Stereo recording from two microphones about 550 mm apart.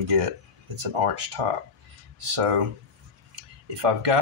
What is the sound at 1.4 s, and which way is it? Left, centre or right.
Speech, right.